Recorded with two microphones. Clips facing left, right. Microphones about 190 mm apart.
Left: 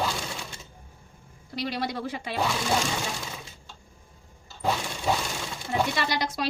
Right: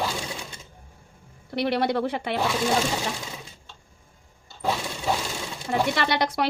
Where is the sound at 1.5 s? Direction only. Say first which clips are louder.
Right 7 dB; 60° right (ahead or behind).